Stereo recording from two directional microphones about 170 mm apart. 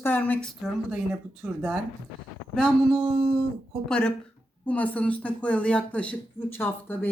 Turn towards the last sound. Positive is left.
turn(degrees=10)  # may be behind; listen again after turning